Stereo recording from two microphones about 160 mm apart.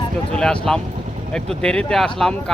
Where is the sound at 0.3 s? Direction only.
5° left (ahead or behind).